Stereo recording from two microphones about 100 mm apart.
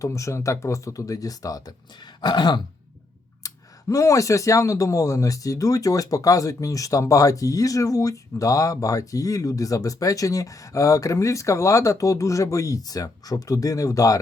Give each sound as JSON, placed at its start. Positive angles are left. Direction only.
{"t": 0.0, "sound": "speech", "side_deg": 30}
{"t": 3.4, "sound": "speech", "side_deg": 35}